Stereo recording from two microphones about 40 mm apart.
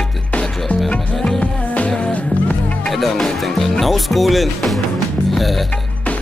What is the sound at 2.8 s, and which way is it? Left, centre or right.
Speech, centre.